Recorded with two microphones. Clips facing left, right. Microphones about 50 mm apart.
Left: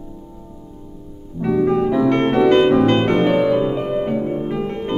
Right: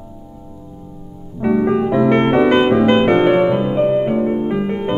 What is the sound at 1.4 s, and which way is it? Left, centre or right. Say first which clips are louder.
Music: right 1 dB; right.